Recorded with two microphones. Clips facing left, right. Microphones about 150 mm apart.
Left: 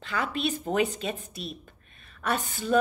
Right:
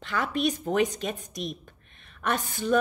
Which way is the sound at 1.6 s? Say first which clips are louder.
Right 1 dB; 5° left (ahead or behind).